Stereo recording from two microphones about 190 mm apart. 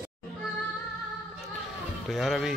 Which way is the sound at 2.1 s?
Centre (ahead or behind).